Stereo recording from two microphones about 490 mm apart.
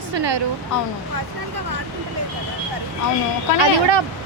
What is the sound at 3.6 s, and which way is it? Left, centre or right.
Speech, right.